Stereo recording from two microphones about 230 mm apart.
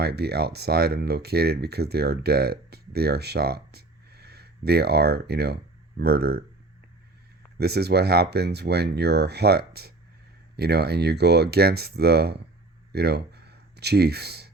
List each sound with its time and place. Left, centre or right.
0.0 s speech: right
7.6 s speech: right
12.9 s a sound: right